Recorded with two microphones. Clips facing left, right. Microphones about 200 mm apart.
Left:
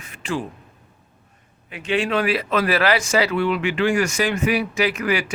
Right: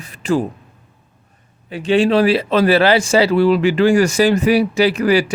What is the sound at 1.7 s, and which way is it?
Speech, 30° right (ahead or behind).